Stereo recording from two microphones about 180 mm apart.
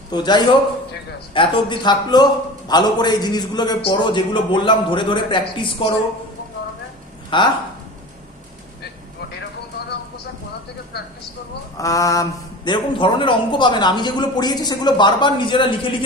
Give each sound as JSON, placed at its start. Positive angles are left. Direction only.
{"t": 0.1, "sound": "a man's voice", "side_deg": 25}
{"t": 7.3, "sound": "a man's voice", "side_deg": 25}
{"t": 11.8, "sound": "a man's voice", "side_deg": 20}